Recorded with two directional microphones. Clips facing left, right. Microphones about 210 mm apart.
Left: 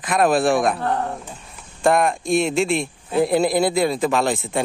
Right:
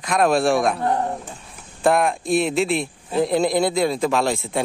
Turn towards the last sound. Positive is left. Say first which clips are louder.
# left 1 dB
turn(degrees=0)  # may be behind; listen again after turning